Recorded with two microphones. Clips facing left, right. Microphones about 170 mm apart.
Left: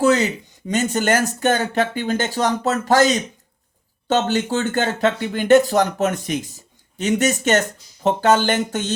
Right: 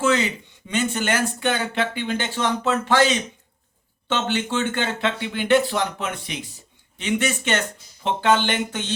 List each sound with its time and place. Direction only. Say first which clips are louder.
0.0 s speech: left 4 dB; 40° left (ahead or behind)